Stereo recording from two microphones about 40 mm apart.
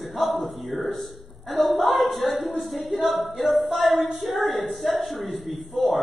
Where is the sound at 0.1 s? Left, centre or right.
Centre.